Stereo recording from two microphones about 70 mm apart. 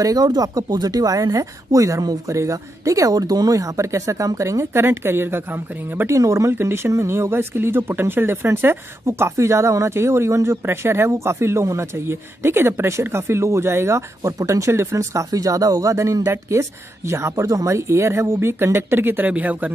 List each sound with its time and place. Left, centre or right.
0.0 s speech: right
6.0 s speech: right